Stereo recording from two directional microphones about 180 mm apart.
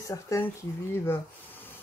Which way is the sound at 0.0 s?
15° left (ahead or behind).